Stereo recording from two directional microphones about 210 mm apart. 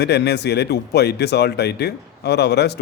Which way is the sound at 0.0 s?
50° left (ahead or behind).